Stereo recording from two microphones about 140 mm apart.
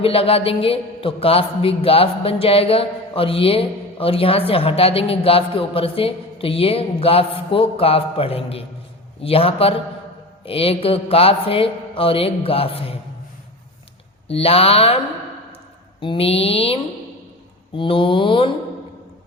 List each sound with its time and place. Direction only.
0.0 s a man's voice: 40° left (ahead or behind)
14.3 s a man's voice: 45° left (ahead or behind)
16.0 s a man's voice: 40° left (ahead or behind)
17.7 s mantra: 40° left (ahead or behind)